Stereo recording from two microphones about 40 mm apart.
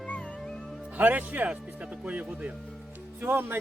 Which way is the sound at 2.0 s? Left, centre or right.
Right.